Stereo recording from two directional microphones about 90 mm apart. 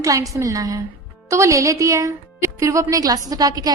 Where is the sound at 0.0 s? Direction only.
40° right (ahead or behind).